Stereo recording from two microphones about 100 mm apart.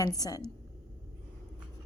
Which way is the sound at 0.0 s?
40° left (ahead or behind).